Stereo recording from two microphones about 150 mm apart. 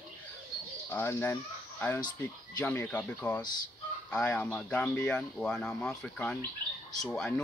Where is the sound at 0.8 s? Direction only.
15° left (ahead or behind).